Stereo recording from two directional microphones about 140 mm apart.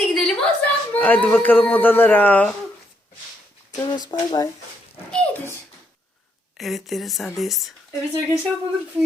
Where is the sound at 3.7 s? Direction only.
25° left (ahead or behind).